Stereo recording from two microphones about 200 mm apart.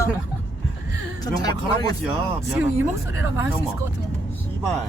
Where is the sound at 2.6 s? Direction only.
10° right (ahead or behind).